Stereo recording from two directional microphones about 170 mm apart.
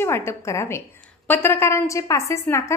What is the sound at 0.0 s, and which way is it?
A woman's voice, 15° left (ahead or behind).